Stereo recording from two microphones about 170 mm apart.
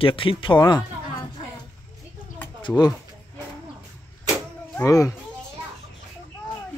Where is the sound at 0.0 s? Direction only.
30° left (ahead or behind).